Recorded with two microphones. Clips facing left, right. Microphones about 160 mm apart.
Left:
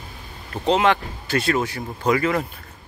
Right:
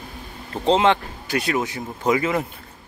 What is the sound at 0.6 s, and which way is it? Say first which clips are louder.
Speech: right 1 dB; 25° right (ahead or behind).